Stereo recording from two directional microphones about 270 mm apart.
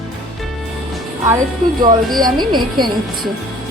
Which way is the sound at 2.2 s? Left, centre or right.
Centre.